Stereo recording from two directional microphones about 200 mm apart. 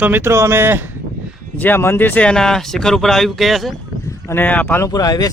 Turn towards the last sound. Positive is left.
turn(degrees=20)  # may be behind; listen again after turning